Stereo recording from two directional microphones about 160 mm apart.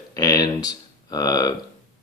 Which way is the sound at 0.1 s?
25° left (ahead or behind).